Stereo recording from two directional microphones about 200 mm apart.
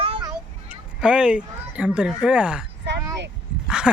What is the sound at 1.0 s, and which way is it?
Speech, 5° right (ahead or behind).